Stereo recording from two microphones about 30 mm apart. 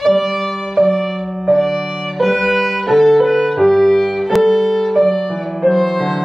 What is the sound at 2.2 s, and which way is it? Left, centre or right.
Music, centre.